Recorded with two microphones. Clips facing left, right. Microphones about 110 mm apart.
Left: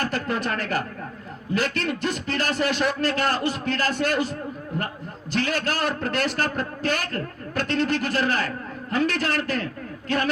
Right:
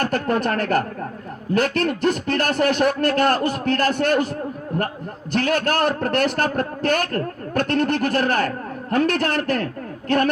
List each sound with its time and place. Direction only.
0.0 s a man's voice: 55° right (ahead or behind)